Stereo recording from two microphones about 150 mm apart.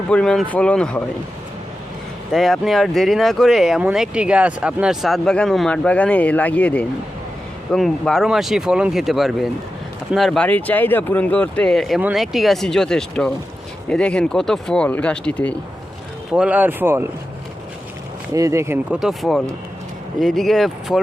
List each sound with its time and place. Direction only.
0.1 s speech: 5° left (ahead or behind)
2.3 s speech: centre (ahead or behind)
16.3 s speech: 10° right (ahead or behind)
18.3 s speech: 20° right (ahead or behind)
18.9 s speech: centre (ahead or behind)